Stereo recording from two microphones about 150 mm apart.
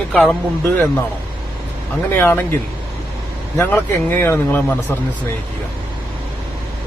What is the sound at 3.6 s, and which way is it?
Speech, 15° left (ahead or behind).